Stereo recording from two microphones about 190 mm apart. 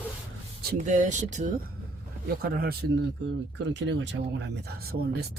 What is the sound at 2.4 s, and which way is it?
Speech, 50° right (ahead or behind).